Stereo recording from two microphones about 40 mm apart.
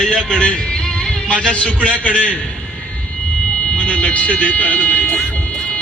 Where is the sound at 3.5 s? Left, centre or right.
Left.